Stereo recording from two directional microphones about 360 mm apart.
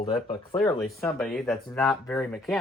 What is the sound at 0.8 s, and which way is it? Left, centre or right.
Speech, centre.